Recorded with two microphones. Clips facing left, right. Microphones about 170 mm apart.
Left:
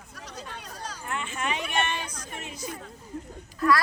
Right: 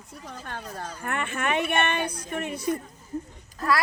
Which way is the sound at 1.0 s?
60° right (ahead or behind).